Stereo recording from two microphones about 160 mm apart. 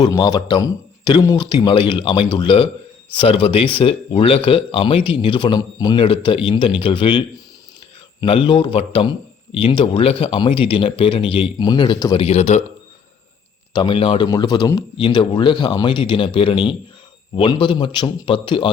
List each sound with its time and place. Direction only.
0.0 s a man's voice: 25° left (ahead or behind)
12.1 s speech: 40° left (ahead or behind)
13.7 s a man's voice: 30° left (ahead or behind)